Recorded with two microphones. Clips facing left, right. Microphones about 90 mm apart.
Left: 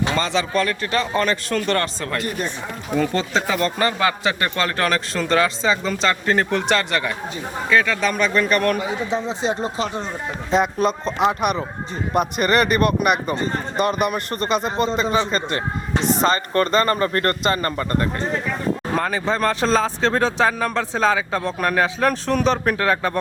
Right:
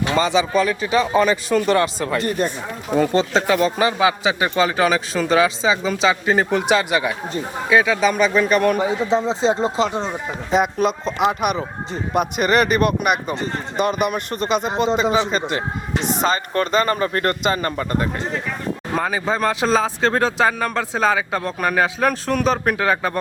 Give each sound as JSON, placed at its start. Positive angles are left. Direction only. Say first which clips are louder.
{"t": 0.1, "sound": "a man's voice", "louder": "right 3 dB", "side_deg": -5}
{"t": 3.3, "sound": "a man's voice", "louder": "right 3 dB", "side_deg": 0}
{"t": 9.2, "sound": "speech", "louder": "right 4 dB", "side_deg": -30}
{"t": 10.1, "sound": "speech", "louder": "right 1 dB", "side_deg": -5}
{"t": 15.0, "sound": "a man's voice", "louder": "right 2 dB", "side_deg": -15}
{"t": 15.3, "sound": "speech", "louder": "right 1 dB", "side_deg": -5}